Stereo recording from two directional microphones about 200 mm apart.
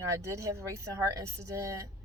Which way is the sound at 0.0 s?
15° right (ahead or behind).